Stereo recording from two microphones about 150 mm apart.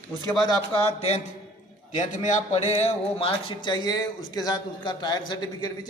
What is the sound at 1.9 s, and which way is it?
A man's voice, 55° left (ahead or behind).